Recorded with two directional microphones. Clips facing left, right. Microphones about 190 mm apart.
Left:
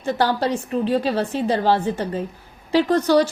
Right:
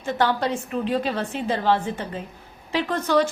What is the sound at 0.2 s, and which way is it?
A woman's voice, 35° left (ahead or behind).